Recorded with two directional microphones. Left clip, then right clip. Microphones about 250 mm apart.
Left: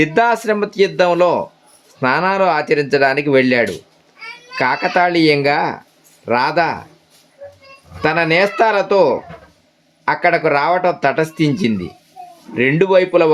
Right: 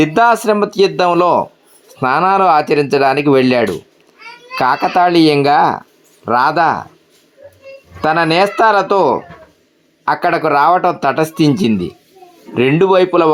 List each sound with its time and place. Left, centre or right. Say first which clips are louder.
0.0 s speech: right 3 dB; centre
8.0 s speech: right 2 dB; centre